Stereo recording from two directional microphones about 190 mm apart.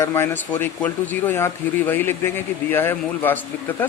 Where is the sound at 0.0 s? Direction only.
15° left (ahead or behind).